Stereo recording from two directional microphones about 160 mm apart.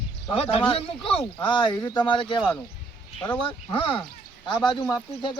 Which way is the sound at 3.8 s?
30° left (ahead or behind).